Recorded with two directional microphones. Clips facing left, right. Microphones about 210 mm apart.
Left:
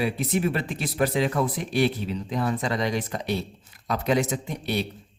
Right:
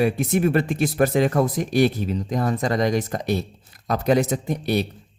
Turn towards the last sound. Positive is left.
turn(degrees=-40)  # may be behind; listen again after turning